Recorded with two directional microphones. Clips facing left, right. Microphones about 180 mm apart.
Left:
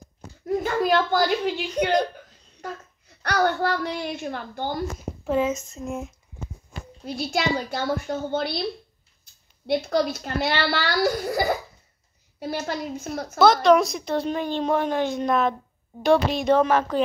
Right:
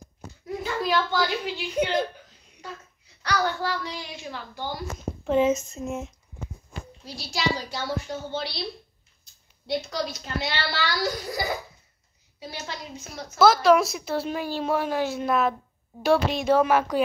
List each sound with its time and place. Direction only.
0.5 s speech: 50° left (ahead or behind)
1.8 s a woman's voice: 5° right (ahead or behind)
2.6 s a child's voice: 50° left (ahead or behind)
7.1 s a child's voice: 55° left (ahead or behind)
13.4 s a woman's voice: 5° right (ahead or behind)